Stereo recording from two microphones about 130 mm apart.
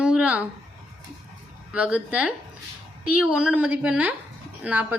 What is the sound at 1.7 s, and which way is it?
A woman's voice, 10° right (ahead or behind).